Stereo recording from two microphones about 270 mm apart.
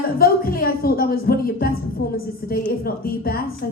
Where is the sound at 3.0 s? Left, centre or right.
Left.